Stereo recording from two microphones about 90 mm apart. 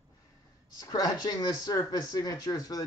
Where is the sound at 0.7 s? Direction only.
45° left (ahead or behind).